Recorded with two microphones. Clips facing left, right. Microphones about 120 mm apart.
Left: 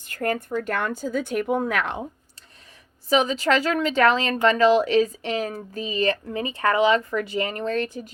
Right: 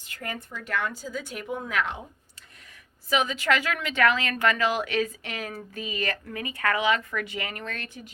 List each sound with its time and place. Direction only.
0.1 s a woman's voice: 50° left (ahead or behind)
3.1 s speech: 35° left (ahead or behind)